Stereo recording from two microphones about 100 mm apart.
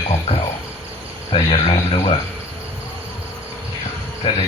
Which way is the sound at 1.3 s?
55° left (ahead or behind).